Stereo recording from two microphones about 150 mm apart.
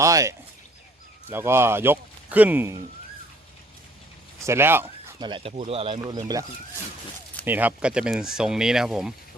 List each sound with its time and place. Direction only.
0.0 s speech: 20° right (ahead or behind)
4.4 s speech: 15° right (ahead or behind)
5.2 s speech: 35° right (ahead or behind)
7.4 s speech: 10° right (ahead or behind)